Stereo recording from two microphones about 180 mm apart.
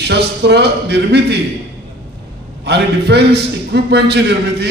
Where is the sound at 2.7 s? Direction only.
65° right (ahead or behind).